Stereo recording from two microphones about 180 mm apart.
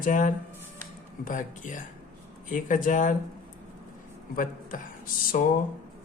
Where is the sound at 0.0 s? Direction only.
45° left (ahead or behind).